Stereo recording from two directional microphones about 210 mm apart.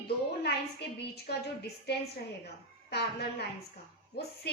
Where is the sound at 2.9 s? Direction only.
50° left (ahead or behind).